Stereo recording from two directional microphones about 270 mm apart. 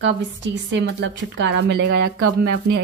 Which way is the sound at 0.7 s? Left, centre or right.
Right.